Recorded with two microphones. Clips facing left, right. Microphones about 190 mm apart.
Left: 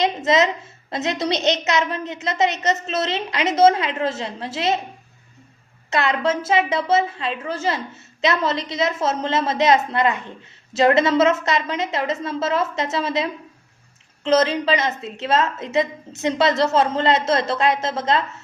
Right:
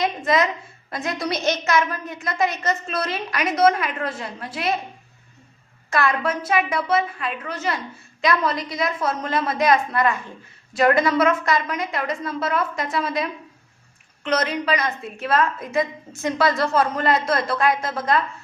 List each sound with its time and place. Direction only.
0.0 s a woman's voice: 20° left (ahead or behind)
5.9 s a woman's voice: 20° left (ahead or behind)